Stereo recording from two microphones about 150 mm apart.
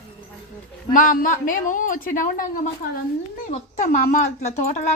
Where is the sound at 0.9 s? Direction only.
60° left (ahead or behind).